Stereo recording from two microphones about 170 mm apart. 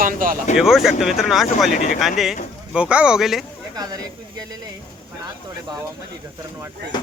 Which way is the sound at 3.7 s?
20° right (ahead or behind).